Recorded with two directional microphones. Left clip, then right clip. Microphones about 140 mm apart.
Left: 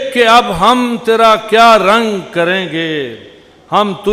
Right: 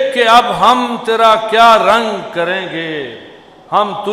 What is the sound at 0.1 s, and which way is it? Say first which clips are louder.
A man's voice: left 3 dB; 35° left (ahead or behind).